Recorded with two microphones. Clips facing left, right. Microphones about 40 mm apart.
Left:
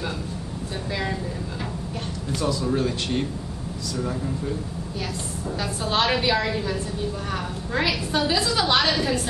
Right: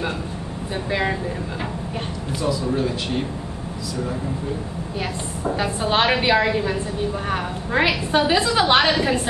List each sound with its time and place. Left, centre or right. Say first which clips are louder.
2.4 s a man's voice: right 2 dB; centre
5.6 s a woman's voice: right 3 dB; right